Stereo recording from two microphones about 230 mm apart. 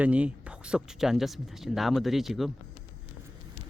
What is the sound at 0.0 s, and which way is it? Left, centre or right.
Speech, centre.